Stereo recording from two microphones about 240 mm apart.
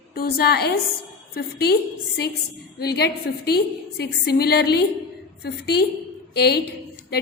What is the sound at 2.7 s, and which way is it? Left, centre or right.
A woman's voice, left.